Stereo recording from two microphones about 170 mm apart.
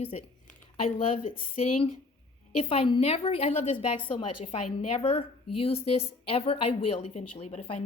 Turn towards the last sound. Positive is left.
turn(degrees=35)  # may be behind; listen again after turning